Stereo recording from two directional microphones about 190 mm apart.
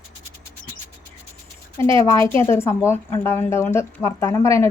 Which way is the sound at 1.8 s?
15° left (ahead or behind).